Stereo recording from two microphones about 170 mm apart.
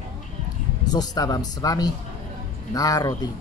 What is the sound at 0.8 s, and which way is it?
Speech, 20° left (ahead or behind).